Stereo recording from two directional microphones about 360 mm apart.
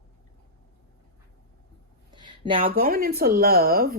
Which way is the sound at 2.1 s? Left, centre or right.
Centre.